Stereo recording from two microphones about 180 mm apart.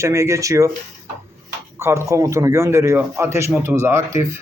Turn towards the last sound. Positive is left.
turn(degrees=-15)  # may be behind; listen again after turning